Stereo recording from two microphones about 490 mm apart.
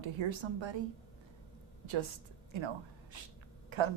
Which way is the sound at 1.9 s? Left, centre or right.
Right.